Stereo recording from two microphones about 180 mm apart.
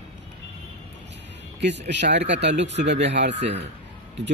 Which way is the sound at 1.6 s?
75° right (ahead or behind).